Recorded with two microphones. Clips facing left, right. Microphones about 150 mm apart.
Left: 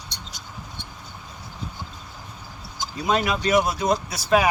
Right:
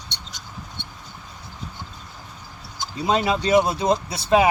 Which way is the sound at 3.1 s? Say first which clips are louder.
Right 2 dB; 25° right (ahead or behind).